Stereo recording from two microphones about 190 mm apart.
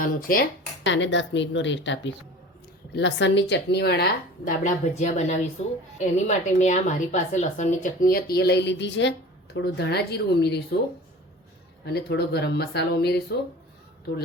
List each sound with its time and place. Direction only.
0.0 s speech: 50° left (ahead or behind)
0.9 s a woman's voice: 75° left (ahead or behind)
11.9 s a woman's voice: 55° left (ahead or behind)